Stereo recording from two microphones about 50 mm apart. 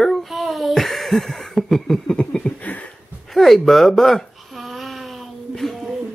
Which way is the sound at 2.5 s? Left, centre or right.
Left.